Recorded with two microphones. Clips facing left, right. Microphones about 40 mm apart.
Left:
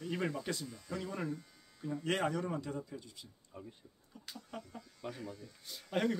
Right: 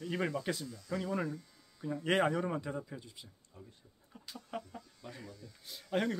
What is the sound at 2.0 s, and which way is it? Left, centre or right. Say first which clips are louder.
Speech: right 4 dB; centre.